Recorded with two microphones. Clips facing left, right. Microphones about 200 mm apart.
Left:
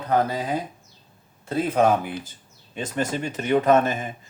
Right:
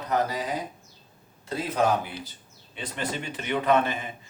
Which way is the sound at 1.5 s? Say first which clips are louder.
Left 5 dB; 55° left (ahead or behind).